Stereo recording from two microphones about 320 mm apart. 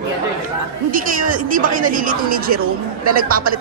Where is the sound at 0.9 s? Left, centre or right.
Right.